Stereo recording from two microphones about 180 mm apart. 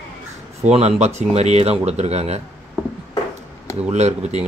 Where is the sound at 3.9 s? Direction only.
40° right (ahead or behind).